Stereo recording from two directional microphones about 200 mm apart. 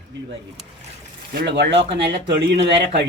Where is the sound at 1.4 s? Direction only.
60° right (ahead or behind).